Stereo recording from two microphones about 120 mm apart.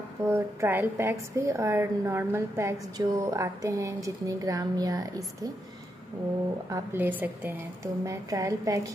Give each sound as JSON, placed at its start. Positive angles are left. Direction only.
{"t": 0.2, "sound": "a woman's voice", "side_deg": -20}
{"t": 6.7, "sound": "a woman's voice", "side_deg": -20}
{"t": 7.8, "sound": "a woman's voice", "side_deg": -25}